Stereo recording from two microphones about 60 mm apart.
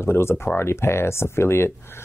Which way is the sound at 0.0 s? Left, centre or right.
Left.